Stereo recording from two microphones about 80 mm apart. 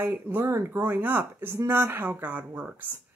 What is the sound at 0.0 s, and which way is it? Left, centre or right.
Speech, right.